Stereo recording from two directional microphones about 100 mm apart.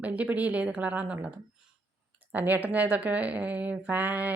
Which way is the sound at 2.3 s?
15° right (ahead or behind).